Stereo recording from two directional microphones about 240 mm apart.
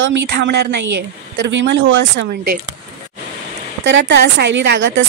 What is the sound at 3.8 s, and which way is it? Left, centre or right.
Speech, right.